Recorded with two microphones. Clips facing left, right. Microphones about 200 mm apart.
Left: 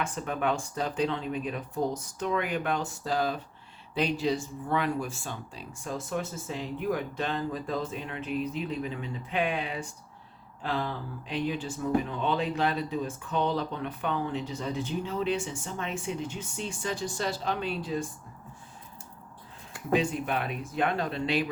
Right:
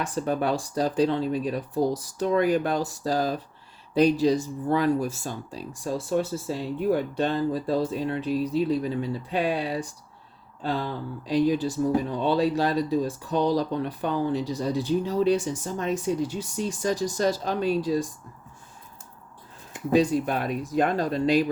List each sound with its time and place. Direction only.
0.0 s speech: 35° right (ahead or behind)
10.6 s a sound: 35° right (ahead or behind)
11.3 s speech: 40° right (ahead or behind)
19.9 s speech: 35° right (ahead or behind)